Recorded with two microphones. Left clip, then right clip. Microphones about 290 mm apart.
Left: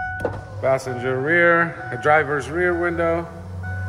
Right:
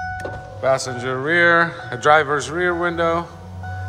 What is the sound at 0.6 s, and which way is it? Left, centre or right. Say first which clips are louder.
Speech: right 1 dB; centre.